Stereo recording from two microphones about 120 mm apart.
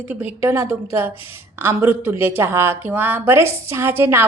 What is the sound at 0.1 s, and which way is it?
Speech, 15° right (ahead or behind).